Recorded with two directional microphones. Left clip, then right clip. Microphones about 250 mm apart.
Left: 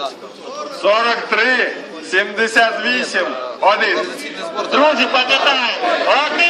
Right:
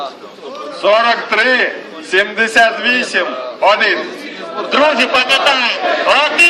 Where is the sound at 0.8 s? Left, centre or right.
Right.